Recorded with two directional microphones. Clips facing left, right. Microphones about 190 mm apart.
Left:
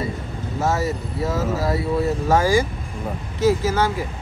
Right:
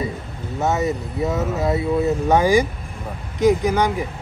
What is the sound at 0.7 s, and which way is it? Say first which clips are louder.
Speech: right 2 dB; 20° right (ahead or behind).